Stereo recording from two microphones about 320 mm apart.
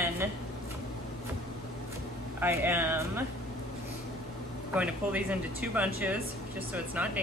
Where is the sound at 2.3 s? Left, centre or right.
Centre.